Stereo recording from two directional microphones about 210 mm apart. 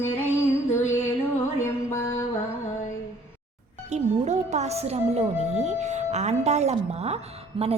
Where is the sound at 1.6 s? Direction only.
10° left (ahead or behind).